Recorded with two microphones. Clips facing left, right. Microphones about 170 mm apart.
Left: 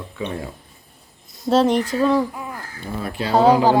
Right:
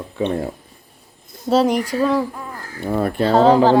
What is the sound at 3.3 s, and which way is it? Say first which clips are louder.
Speech: right 1 dB; 10° left (ahead or behind).